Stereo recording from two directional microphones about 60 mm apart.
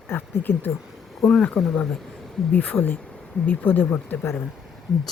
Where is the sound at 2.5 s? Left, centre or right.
Left.